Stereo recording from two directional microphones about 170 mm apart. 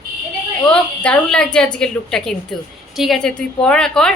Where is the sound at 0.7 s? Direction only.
5° left (ahead or behind).